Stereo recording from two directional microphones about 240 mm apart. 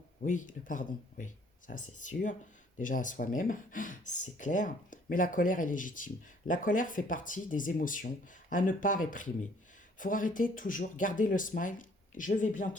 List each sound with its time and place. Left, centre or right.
0.2 s speech: left